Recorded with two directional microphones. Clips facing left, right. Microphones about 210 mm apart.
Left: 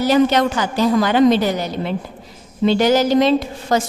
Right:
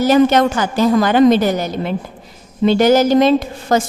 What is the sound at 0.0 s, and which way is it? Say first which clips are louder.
A woman's voice: right 3 dB; 50° right (ahead or behind).